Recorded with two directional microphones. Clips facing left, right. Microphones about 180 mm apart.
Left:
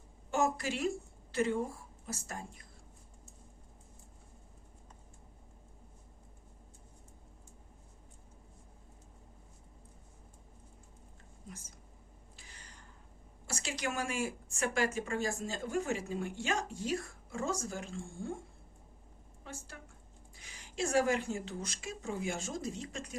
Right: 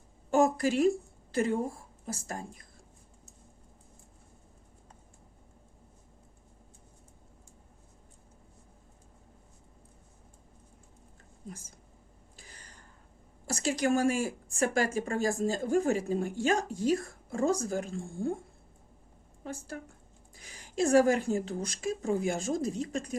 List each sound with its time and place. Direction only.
0.3 s a woman's voice: 40° right (ahead or behind)
12.5 s a sound: 40° right (ahead or behind)
13.5 s speech: 40° right (ahead or behind)
19.5 s speech: 45° right (ahead or behind)